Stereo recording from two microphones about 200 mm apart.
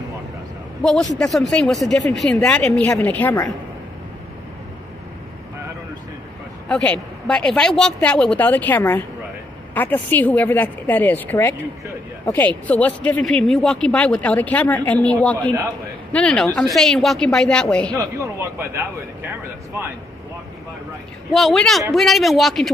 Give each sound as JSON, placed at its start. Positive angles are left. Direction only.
{"t": 0.8, "sound": "speech", "side_deg": 0}
{"t": 6.7, "sound": "speech", "side_deg": 5}
{"t": 17.9, "sound": "speech", "side_deg": -15}
{"t": 21.3, "sound": "speech", "side_deg": 0}